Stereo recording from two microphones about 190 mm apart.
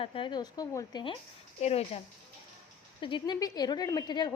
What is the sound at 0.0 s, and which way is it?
A woman's voice, 30° left (ahead or behind).